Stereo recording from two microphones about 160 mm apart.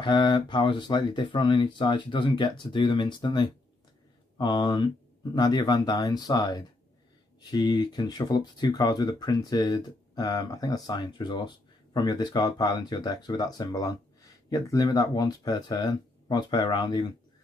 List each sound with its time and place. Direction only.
0.0 s speech: 30° left (ahead or behind)